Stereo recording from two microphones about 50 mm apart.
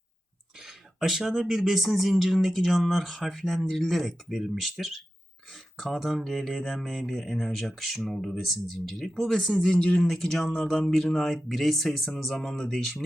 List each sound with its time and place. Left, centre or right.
0.9 s speech: centre
9.6 s speech: centre
10.0 s speech: centre